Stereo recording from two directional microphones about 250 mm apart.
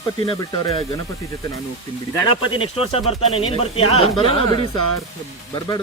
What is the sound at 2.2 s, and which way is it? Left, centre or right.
Speech, left.